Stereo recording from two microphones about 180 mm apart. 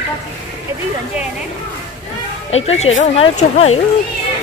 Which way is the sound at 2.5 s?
35° left (ahead or behind).